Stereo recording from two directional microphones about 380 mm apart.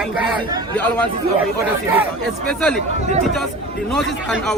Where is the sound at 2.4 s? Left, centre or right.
Centre.